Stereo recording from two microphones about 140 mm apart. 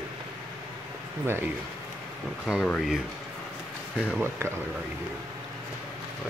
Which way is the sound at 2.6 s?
5° left (ahead or behind).